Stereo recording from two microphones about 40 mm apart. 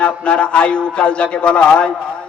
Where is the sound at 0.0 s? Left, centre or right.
Left.